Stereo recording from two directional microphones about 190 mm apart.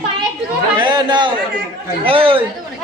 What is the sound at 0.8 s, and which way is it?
Chatter, 25° right (ahead or behind).